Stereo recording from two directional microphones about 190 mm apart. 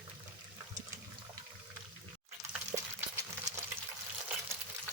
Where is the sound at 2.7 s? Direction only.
15° right (ahead or behind).